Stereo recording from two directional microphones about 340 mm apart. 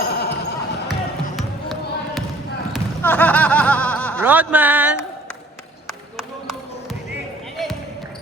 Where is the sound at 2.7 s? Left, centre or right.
Centre.